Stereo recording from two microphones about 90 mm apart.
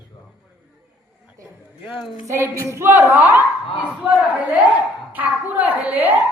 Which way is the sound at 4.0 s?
10° right (ahead or behind).